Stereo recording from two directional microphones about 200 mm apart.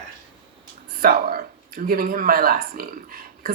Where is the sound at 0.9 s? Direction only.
50° right (ahead or behind).